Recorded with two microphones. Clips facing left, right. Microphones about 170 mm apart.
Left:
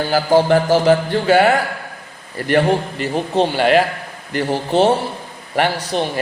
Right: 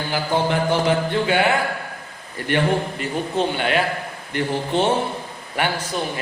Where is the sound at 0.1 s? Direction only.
40° left (ahead or behind).